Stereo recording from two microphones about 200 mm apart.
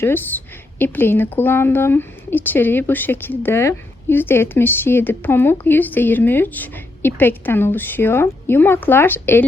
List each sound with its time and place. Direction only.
0.0 s speech: 10° left (ahead or behind)